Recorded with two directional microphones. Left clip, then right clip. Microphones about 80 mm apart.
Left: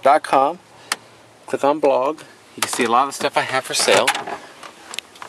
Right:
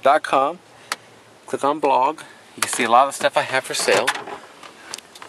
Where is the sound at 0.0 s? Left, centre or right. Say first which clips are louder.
Left 2 dB; centre.